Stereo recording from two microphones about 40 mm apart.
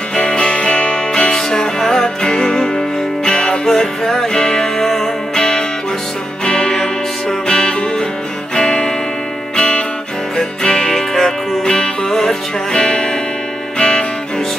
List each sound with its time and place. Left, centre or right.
0.1 s music: left
1.3 s music: centre
9.6 s music: left
10.3 s music: centre